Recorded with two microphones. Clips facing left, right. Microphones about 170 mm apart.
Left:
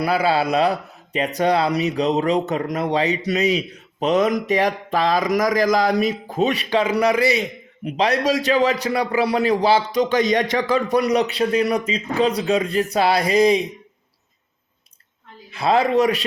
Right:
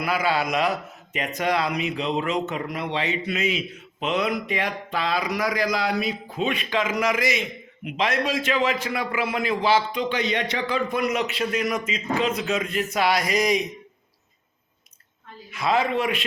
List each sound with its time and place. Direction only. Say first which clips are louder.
0.0 s speech: left 5 dB; 35° left (ahead or behind)
15.4 s speech: left 5 dB; 35° left (ahead or behind)